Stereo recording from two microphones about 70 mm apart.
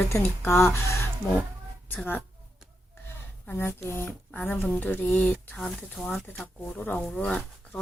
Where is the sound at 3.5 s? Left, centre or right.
Left.